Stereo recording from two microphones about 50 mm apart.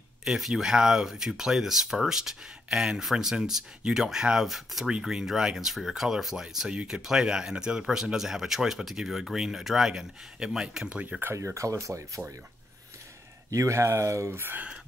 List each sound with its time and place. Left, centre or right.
0.4 s speech: centre
10.9 s speech: right
11.3 s speech: right
13.6 s speech: right
14.3 s speech: right